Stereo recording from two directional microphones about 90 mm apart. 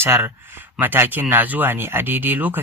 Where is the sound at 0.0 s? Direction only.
25° right (ahead or behind).